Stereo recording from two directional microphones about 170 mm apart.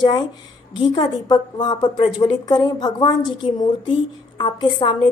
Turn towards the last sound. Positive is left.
turn(degrees=30)  # may be behind; listen again after turning